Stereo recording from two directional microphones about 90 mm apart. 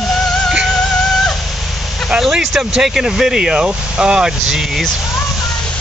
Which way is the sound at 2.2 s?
Centre (ahead or behind).